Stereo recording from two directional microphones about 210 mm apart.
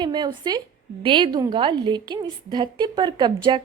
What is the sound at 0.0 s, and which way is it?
A woman's voice, 20° right (ahead or behind).